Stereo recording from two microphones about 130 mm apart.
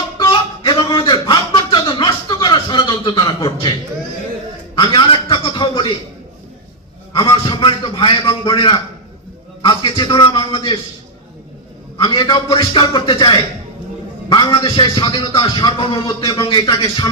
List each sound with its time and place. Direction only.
0.2 s a sound: 35° left (ahead or behind)
7.1 s a sound: 40° left (ahead or behind)
8.3 s a man's voice: 40° left (ahead or behind)
12.0 s a man's voice: 35° left (ahead or behind)
16.4 s a man's voice: 40° left (ahead or behind)
16.6 s a man's voice: 30° left (ahead or behind)